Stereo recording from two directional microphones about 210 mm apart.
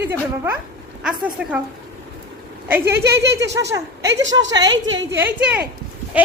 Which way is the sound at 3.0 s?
55° right (ahead or behind).